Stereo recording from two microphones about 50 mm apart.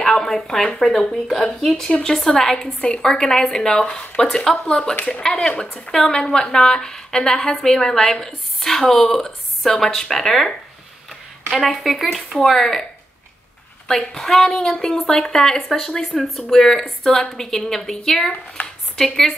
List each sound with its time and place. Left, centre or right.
0.0 s speech: centre
3.8 s speech: left
4.6 s speech: centre
11.5 s speech: centre
13.8 s speech: centre
18.6 s a sound: left
18.9 s speech: centre